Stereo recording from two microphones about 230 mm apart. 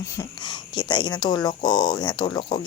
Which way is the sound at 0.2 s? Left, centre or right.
Centre.